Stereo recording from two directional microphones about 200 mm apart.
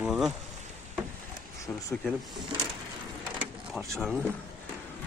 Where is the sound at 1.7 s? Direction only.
10° left (ahead or behind).